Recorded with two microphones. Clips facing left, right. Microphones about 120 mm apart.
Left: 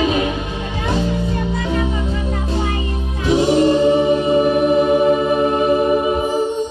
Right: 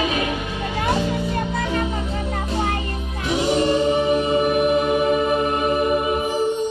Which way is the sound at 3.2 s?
35° left (ahead or behind).